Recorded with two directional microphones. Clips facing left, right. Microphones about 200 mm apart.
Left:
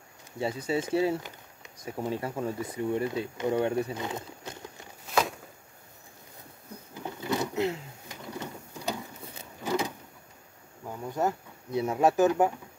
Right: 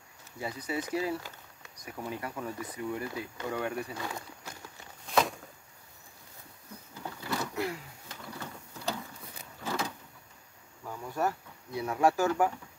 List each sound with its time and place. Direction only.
0.4 s speech: 25° left (ahead or behind)
5.1 s walk: 5° left (ahead or behind)
6.9 s a sound: 20° left (ahead or behind)
10.9 s speech: 20° left (ahead or behind)